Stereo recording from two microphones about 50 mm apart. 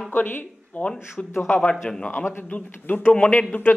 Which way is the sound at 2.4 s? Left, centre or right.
Left.